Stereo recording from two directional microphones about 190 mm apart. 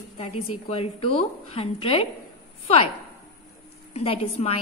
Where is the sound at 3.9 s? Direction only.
30° left (ahead or behind).